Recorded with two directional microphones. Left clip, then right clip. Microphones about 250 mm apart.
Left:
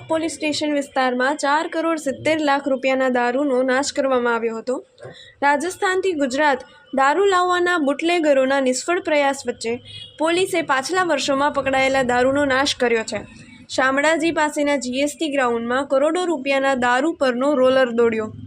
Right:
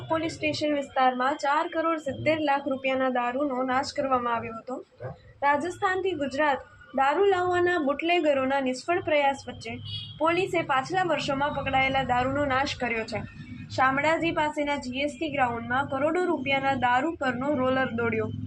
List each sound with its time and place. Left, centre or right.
0.1 s a woman's voice: left